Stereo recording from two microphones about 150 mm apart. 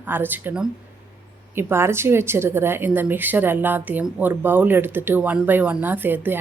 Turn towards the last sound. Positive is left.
turn(degrees=-10)  # may be behind; listen again after turning